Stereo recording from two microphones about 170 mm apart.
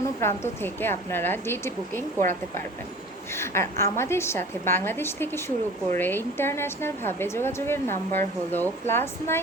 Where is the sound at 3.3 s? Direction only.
15° left (ahead or behind).